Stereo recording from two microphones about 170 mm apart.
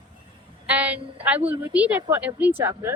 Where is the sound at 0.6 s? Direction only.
10° right (ahead or behind).